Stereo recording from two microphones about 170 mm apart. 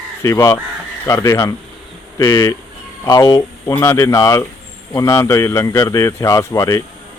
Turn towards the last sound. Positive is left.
turn(degrees=20)  # may be behind; listen again after turning